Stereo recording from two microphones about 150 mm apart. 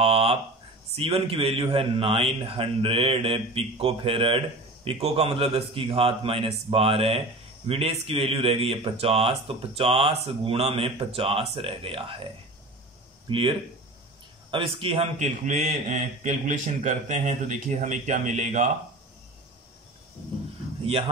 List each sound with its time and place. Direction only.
0.0 s a sound: 40° right (ahead or behind)
0.9 s a man's voice: 40° right (ahead or behind)
13.3 s a man's voice: 35° right (ahead or behind); by 18.7 s 50° right (ahead or behind)